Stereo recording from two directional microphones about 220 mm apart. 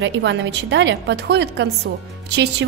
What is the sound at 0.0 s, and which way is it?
A woman's voice, 55° right (ahead or behind).